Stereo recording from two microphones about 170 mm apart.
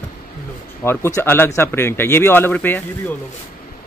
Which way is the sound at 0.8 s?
15° left (ahead or behind).